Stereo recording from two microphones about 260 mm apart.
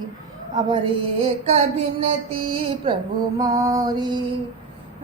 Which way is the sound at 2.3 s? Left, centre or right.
Right.